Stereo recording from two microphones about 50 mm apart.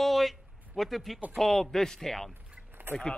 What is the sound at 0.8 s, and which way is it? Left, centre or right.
Speech, centre.